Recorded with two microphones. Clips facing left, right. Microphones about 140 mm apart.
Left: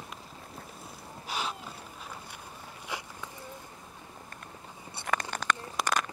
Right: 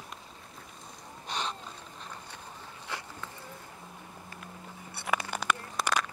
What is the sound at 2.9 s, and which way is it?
Insect, 15° left (ahead or behind).